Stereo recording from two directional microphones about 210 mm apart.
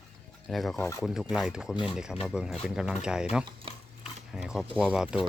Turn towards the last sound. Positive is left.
turn(degrees=-5)  # may be behind; listen again after turning